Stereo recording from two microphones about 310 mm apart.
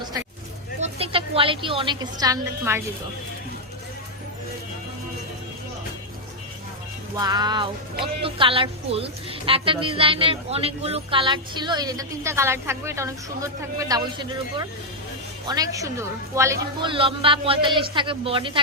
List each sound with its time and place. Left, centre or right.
0.8 s a woman's voice: centre
7.2 s a woman's voice: centre